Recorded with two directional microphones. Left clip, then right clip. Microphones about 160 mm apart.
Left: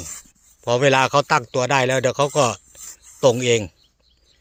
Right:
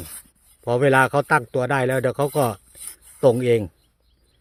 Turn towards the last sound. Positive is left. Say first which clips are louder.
# left 1 dB
turn(degrees=-30)  # may be behind; listen again after turning